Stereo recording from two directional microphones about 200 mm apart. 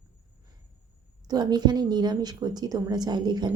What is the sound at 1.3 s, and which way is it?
A woman's voice, 20° right (ahead or behind).